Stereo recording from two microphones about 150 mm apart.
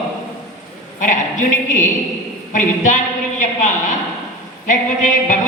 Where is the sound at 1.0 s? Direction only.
55° left (ahead or behind).